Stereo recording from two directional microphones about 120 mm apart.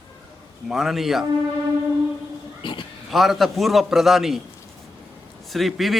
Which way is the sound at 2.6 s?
40° left (ahead or behind).